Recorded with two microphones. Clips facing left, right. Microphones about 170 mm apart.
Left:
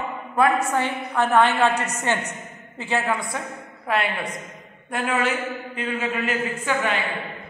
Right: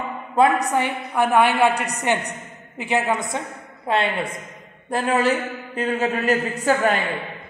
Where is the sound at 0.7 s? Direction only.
10° right (ahead or behind); by 7.0 s 40° right (ahead or behind).